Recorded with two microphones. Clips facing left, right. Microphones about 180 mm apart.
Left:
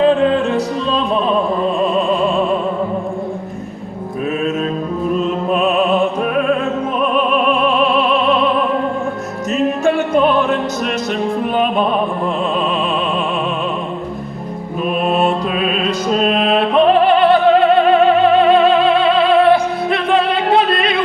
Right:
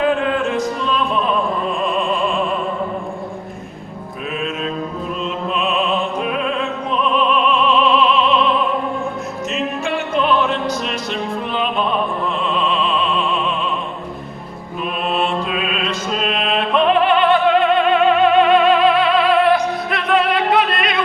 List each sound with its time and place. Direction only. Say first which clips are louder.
0.0 s music: left 5 dB; 30° left (ahead or behind)
5.1 s music: left 6 dB; 45° left (ahead or behind)
9.5 s music: left 8 dB; 45° left (ahead or behind)
15.0 s music: left 3 dB; 40° left (ahead or behind)